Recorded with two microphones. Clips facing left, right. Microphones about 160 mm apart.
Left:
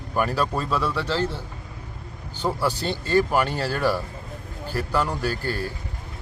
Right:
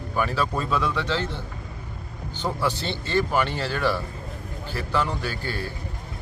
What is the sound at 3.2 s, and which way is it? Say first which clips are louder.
Speech: left 1 dB; 10° left (ahead or behind).